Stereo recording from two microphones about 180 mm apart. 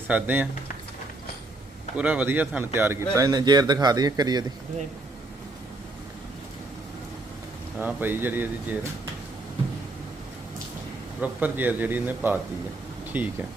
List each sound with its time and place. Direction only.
0.1 s a man's voice: 10° right (ahead or behind)
2.0 s speech: 5° right (ahead or behind)
7.8 s a man's voice: 10° right (ahead or behind)
11.2 s a man's voice: 10° right (ahead or behind)